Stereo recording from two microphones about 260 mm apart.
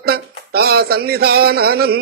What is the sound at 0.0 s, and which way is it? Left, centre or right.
Speech, right.